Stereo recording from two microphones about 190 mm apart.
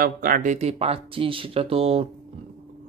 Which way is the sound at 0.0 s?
50° right (ahead or behind).